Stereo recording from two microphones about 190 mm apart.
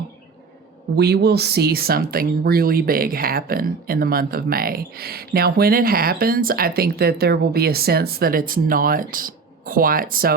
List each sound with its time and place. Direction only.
0.9 s speech: 60° right (ahead or behind)